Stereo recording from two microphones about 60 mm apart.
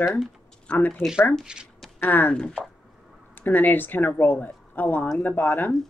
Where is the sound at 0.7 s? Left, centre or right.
Centre.